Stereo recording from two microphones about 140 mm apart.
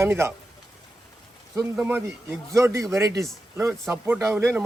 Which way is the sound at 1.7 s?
15° right (ahead or behind).